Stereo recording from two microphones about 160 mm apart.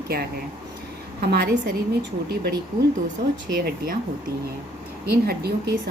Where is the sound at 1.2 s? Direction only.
80° right.